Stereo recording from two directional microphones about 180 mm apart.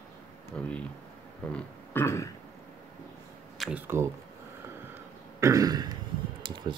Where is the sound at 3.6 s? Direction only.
5° right (ahead or behind).